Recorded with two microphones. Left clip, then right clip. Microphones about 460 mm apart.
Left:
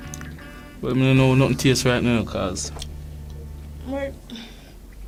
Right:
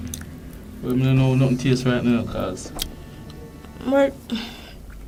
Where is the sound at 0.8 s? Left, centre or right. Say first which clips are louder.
Left 3 dB; left.